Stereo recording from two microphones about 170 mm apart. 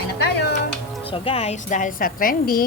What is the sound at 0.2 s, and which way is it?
Music, 75° left (ahead or behind).